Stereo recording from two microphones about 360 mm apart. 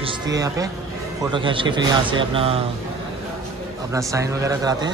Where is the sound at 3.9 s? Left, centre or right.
Centre.